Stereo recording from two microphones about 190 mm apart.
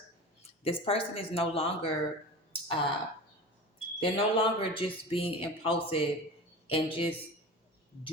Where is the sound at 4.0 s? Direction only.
30° left (ahead or behind).